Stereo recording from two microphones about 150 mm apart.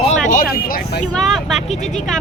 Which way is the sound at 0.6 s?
85° left.